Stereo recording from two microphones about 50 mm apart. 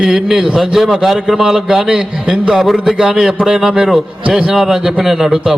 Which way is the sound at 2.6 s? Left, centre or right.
Centre.